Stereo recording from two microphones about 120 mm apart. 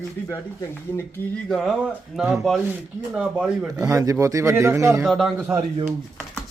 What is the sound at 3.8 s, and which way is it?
Speech, 25° right (ahead or behind).